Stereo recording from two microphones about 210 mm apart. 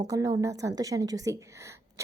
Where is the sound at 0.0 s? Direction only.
15° right (ahead or behind).